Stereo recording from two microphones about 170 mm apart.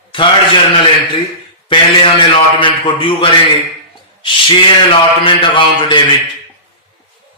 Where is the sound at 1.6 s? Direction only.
30° left (ahead or behind).